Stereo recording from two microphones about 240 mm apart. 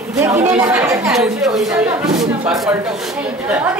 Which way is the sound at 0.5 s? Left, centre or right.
Centre.